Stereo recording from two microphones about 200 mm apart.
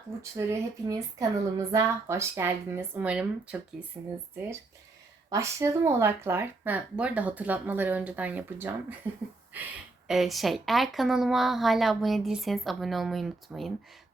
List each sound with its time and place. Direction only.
0.2 s speech: 15° right (ahead or behind)
5.3 s speech: 15° right (ahead or behind)
10.1 s a woman's voice: centre (ahead or behind)